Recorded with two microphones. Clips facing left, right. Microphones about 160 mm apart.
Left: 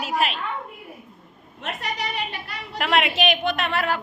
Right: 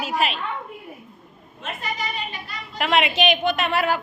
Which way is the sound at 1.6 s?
70° left (ahead or behind).